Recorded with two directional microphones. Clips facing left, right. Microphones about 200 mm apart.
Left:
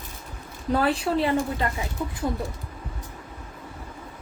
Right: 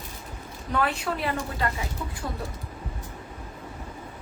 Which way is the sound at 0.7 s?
30° left (ahead or behind).